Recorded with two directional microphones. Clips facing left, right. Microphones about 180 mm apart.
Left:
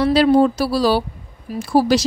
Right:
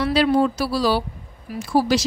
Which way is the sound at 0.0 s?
35° left (ahead or behind).